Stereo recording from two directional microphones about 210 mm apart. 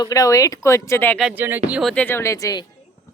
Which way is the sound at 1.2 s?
10° right (ahead or behind).